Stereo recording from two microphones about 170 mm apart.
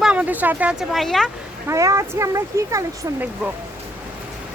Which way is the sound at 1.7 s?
20° right (ahead or behind).